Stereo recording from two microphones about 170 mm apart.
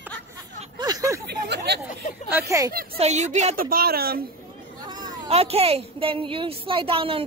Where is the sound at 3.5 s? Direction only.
55° right (ahead or behind).